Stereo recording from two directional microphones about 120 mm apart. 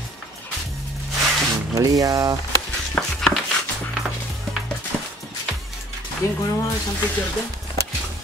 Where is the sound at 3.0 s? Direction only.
10° left (ahead or behind).